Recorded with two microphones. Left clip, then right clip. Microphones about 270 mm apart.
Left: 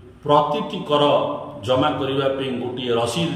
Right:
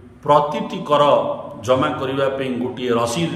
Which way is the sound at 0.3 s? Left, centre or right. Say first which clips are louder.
Right 2 dB; centre.